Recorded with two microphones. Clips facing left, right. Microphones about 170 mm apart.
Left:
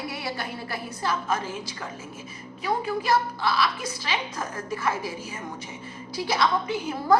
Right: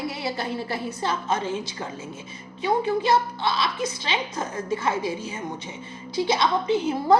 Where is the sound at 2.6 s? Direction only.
25° right (ahead or behind).